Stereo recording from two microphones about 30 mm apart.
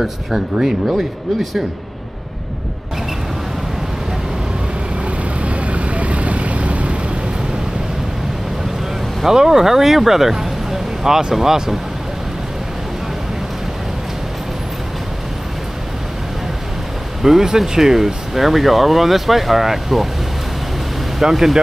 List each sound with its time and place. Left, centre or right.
0.0 s speech: centre
5.0 s vehicle: right
9.3 s speech: centre
17.2 s speech: centre
21.2 s speech: centre